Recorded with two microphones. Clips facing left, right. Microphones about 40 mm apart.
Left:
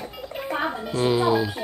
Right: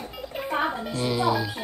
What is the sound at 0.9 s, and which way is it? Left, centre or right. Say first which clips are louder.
Speech: left 6 dB; left.